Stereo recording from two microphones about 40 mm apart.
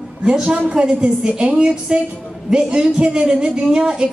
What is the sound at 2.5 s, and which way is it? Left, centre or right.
Speech, right.